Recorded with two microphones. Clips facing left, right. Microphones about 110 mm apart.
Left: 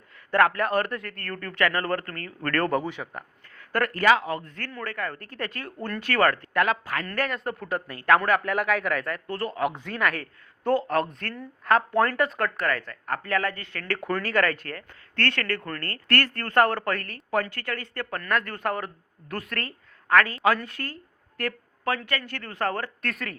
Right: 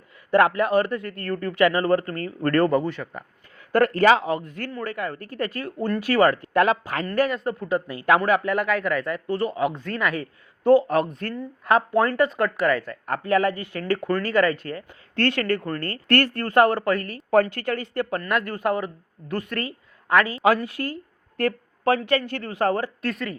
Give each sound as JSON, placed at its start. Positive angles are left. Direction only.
{"t": 0.3, "sound": "speech", "side_deg": -10}
{"t": 2.6, "sound": "speech", "side_deg": 0}
{"t": 2.8, "sound": "speech", "side_deg": 10}
{"t": 3.7, "sound": "speech", "side_deg": -20}
{"t": 6.5, "sound": "speech", "side_deg": -25}
{"t": 7.1, "sound": "speech", "side_deg": -5}
{"t": 9.7, "sound": "speech", "side_deg": 15}
{"t": 10.0, "sound": "speech", "side_deg": 0}
{"t": 14.0, "sound": "speech", "side_deg": 5}
{"t": 14.8, "sound": "speech", "side_deg": -15}
{"t": 17.5, "sound": "speech", "side_deg": -20}
{"t": 21.3, "sound": "speech", "side_deg": -20}
{"t": 23.0, "sound": "speech", "side_deg": 0}